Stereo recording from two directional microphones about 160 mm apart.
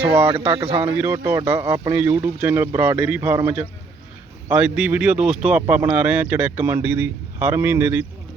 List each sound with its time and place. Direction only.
0.5 s speech: 35° right (ahead or behind)
0.8 s speech: 15° right (ahead or behind)